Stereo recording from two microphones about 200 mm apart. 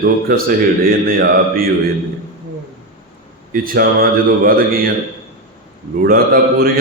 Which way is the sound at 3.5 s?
45° right (ahead or behind).